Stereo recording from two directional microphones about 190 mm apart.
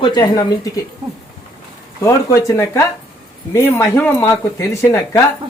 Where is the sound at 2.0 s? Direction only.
15° left (ahead or behind).